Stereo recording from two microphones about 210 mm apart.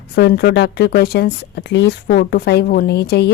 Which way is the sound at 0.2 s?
50° left (ahead or behind).